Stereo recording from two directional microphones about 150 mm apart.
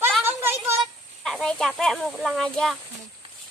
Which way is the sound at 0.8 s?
Centre (ahead or behind).